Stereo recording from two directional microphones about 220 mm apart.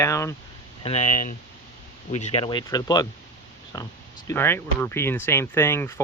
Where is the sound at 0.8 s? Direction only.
30° left (ahead or behind).